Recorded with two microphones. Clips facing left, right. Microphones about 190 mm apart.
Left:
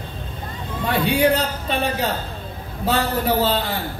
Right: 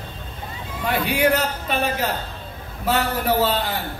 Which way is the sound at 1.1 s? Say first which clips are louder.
Left 2 dB; 30° left (ahead or behind).